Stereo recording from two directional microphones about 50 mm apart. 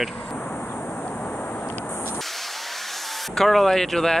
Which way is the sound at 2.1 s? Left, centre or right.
Centre.